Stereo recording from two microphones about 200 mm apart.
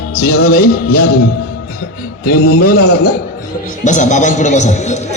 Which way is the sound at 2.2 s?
50° left (ahead or behind).